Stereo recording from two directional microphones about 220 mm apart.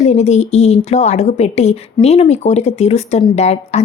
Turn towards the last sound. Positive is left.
turn(degrees=30)  # may be behind; listen again after turning